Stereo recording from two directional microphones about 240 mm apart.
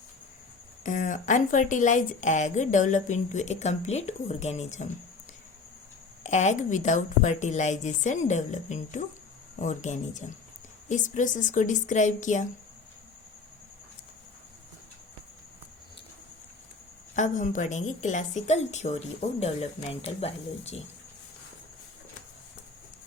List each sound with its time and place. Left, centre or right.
0.9 s a woman's voice: left
6.2 s a woman's voice: left
17.2 s a woman's voice: left